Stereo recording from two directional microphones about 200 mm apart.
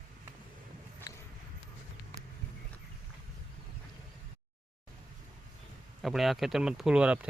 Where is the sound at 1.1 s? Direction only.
20° left (ahead or behind).